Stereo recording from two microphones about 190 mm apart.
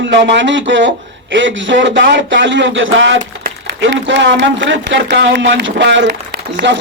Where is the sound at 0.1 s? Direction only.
70° right (ahead or behind).